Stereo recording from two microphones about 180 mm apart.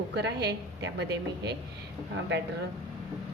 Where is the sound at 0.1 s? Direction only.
70° right (ahead or behind).